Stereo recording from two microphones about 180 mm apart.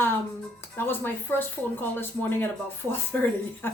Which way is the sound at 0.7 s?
10° left (ahead or behind).